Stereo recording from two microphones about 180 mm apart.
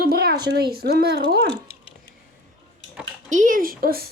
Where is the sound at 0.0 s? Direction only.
60° right (ahead or behind).